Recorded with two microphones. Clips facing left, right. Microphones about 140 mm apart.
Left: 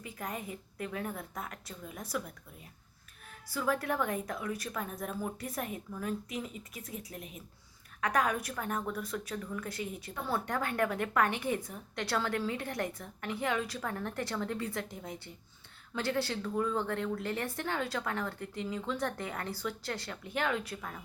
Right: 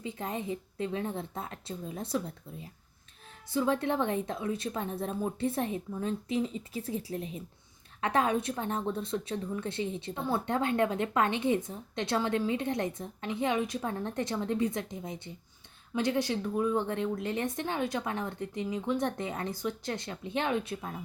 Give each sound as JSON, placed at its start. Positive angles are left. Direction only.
{"t": 0.0, "sound": "a woman's voice", "side_deg": -25}